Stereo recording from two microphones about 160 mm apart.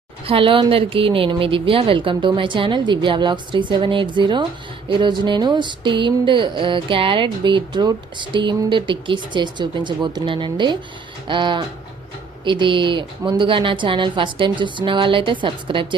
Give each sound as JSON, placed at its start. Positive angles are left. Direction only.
{"t": 0.3, "sound": "a woman's voice", "side_deg": -35}
{"t": 4.9, "sound": "a sound", "side_deg": -30}
{"t": 12.5, "sound": "a woman's voice", "side_deg": -30}